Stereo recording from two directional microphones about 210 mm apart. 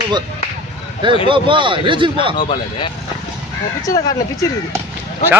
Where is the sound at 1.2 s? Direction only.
25° right (ahead or behind).